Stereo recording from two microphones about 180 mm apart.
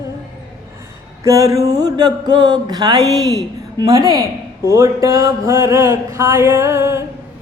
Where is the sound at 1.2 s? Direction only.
15° right (ahead or behind).